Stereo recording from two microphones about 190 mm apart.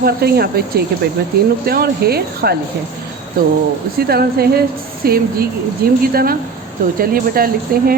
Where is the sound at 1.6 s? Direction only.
55° right (ahead or behind).